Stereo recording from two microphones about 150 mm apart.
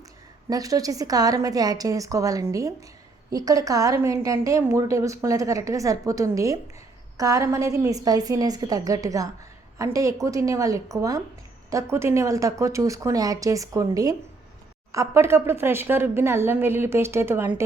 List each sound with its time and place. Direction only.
0.5 s a woman's voice: 25° right (ahead or behind)